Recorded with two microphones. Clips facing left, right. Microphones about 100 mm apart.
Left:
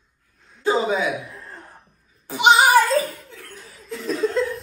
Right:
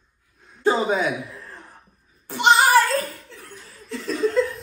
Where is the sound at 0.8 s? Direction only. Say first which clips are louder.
Even; 50° right (ahead or behind).